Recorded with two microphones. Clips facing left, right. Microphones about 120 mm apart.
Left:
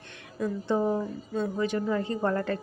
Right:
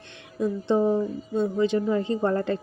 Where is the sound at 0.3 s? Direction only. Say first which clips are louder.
Right 4 dB; 25° right (ahead or behind).